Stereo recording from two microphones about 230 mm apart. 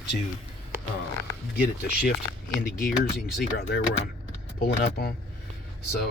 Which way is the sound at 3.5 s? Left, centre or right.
Left.